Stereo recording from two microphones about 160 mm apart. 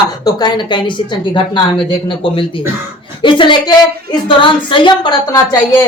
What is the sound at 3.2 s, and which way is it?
Speech, 30° left (ahead or behind).